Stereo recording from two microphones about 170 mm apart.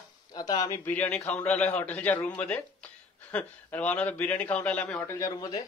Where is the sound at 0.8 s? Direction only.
10° left (ahead or behind).